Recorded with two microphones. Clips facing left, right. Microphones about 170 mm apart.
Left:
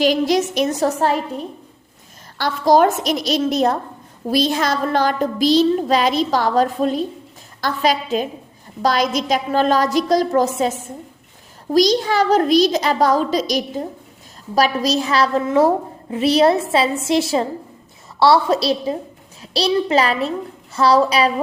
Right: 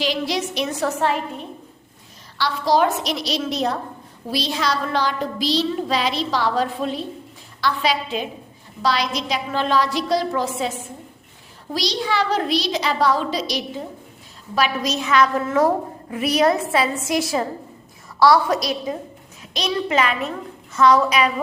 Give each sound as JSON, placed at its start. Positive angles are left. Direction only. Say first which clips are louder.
{"t": 0.0, "sound": "a child's voice", "louder": "left 7 dB", "side_deg": 45}